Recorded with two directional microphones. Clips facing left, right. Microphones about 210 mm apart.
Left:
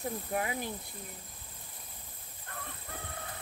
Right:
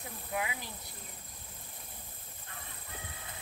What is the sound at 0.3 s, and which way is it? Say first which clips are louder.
Speech: left 1 dB; 45° left (ahead or behind).